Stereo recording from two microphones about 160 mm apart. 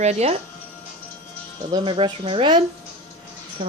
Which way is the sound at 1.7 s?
30° right (ahead or behind).